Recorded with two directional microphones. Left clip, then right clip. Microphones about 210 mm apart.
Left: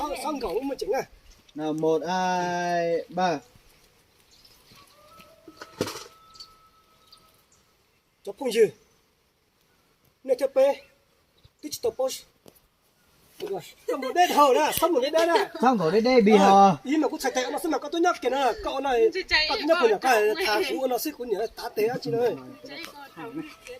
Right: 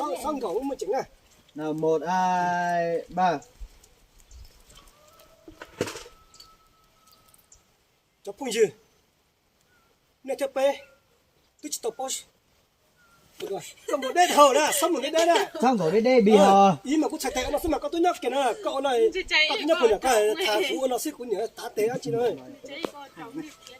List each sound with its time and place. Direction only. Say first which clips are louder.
0.3 s a man's voice: even; 5° right (ahead or behind)
5.5 s a sound: even; 30° left (ahead or behind)
8.4 s speech: left 2 dB; 5° right (ahead or behind)
10.3 s speech: left 4 dB; 15° right (ahead or behind)
11.6 s speech: left 4 dB; 10° right (ahead or behind)
13.4 s a man's voice: left 1 dB; 10° right (ahead or behind)